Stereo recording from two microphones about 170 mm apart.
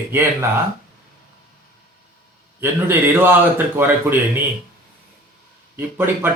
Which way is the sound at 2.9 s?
10° right (ahead or behind).